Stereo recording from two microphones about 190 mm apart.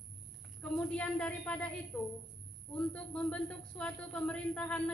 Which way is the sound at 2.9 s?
5° left (ahead or behind).